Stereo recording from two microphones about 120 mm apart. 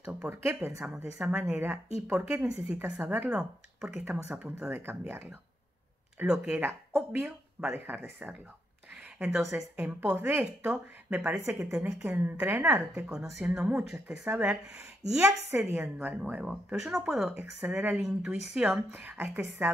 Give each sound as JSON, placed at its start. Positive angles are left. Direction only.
{"t": 0.3, "sound": "speech", "side_deg": -20}
{"t": 1.1, "sound": "speech", "side_deg": -5}
{"t": 1.5, "sound": "speech", "side_deg": -20}
{"t": 6.2, "sound": "speech", "side_deg": -5}
{"t": 9.3, "sound": "speech", "side_deg": -25}
{"t": 9.8, "sound": "speech", "side_deg": -10}
{"t": 17.3, "sound": "speech", "side_deg": -15}
{"t": 17.9, "sound": "speech", "side_deg": -5}
{"t": 18.9, "sound": "speech", "side_deg": -15}